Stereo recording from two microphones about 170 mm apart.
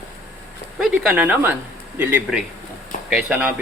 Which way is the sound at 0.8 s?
5° right (ahead or behind).